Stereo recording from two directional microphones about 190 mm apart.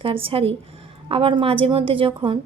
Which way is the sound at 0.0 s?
30° right (ahead or behind).